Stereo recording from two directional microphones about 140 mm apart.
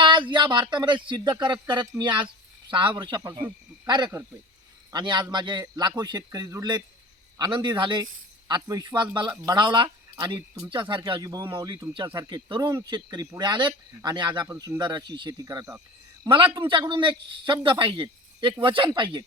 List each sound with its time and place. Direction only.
0.0 s speech: 35° right (ahead or behind)
16.6 s speech: 35° right (ahead or behind)